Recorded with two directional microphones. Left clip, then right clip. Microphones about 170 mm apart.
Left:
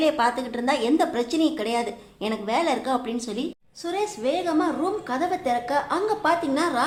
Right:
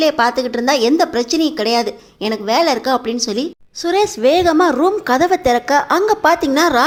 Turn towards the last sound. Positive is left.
turn(degrees=-45)  # may be behind; listen again after turning